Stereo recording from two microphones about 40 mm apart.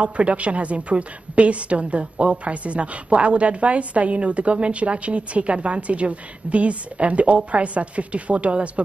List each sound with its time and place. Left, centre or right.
0.0 s a woman's voice: right